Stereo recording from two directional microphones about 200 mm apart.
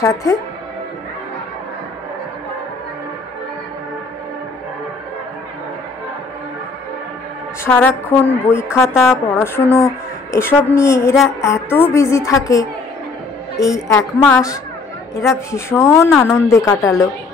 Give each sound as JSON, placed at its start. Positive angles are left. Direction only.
{"t": 0.0, "sound": "a woman's voice", "side_deg": 15}
{"t": 7.6, "sound": "a woman's voice", "side_deg": 10}
{"t": 16.1, "sound": "a woman's voice", "side_deg": 0}
{"t": 16.3, "sound": "a woman's voice", "side_deg": 15}